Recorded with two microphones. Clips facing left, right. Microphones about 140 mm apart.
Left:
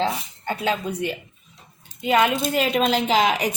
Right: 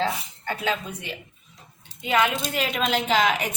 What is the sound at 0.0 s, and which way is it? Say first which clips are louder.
A woman's voice: left 2 dB; 30° left (ahead or behind).